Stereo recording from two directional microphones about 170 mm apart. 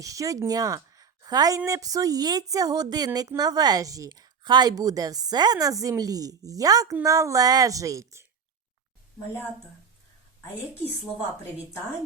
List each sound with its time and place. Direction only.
0.0 s speech: 20° right (ahead or behind)